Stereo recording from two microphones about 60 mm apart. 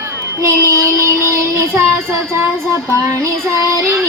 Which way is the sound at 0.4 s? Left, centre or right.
Right.